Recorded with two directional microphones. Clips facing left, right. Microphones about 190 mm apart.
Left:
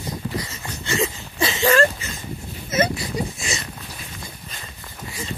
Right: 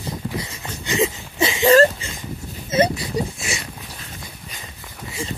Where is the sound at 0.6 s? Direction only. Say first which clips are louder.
Right 4 dB; 20° right (ahead or behind).